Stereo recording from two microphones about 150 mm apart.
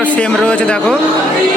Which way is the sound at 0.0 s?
10° left (ahead or behind).